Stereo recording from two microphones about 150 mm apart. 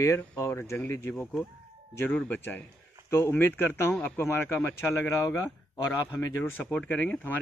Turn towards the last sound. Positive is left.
turn(degrees=10)  # may be behind; listen again after turning